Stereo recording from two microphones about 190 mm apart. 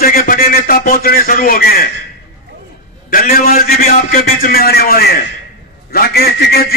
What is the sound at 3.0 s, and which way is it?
A man's voice, 50° left (ahead or behind).